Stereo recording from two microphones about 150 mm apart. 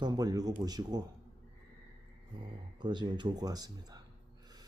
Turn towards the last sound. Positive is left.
turn(degrees=-25)  # may be behind; listen again after turning